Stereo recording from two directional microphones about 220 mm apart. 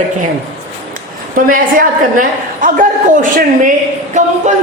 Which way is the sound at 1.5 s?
40° right (ahead or behind).